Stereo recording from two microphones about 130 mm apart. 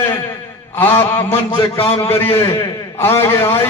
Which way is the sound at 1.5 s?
45° left (ahead or behind).